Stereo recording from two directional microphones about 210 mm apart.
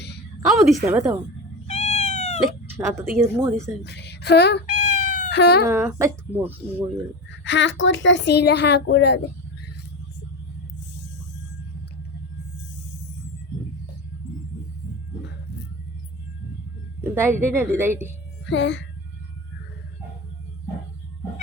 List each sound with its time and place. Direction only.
0.4 s a woman's voice: centre (ahead or behind)
1.6 s cat: 30° left (ahead or behind)
2.4 s speech: 10° right (ahead or behind)
3.8 s speech: 55° left (ahead or behind)
4.6 s cat: 35° left (ahead or behind)
5.3 s speech: 50° left (ahead or behind)
5.6 s speech: 10° right (ahead or behind)
7.4 s a woman's voice: 60° left (ahead or behind)
17.0 s a sound: 10° right (ahead or behind)
17.4 s speech: 10° right (ahead or behind)
18.4 s a woman's voice: 55° left (ahead or behind)